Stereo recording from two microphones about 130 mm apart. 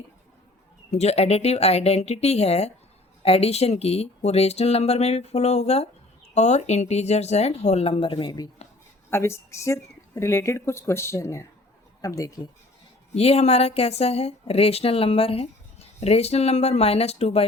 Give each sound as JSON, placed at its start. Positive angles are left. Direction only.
{"t": 0.9, "sound": "speech", "side_deg": 55}
{"t": 9.0, "sound": "speech", "side_deg": 20}
{"t": 13.1, "sound": "speech", "side_deg": 50}